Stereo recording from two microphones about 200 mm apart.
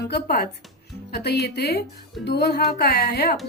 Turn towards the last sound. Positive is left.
turn(degrees=55)  # may be behind; listen again after turning